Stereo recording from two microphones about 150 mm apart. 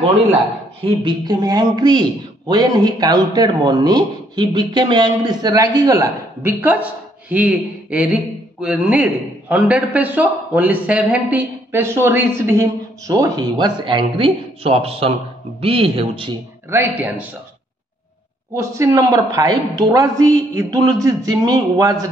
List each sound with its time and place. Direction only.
0.8 s a man's voice: 30° right (ahead or behind)
16.7 s speech: 15° right (ahead or behind)
18.6 s a man's voice: 20° right (ahead or behind)